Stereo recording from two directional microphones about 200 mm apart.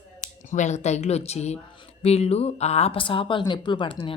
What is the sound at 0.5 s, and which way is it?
A woman's voice, 35° left (ahead or behind).